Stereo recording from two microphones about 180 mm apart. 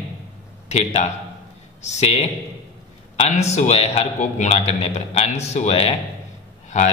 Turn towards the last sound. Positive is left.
turn(degrees=40)  # may be behind; listen again after turning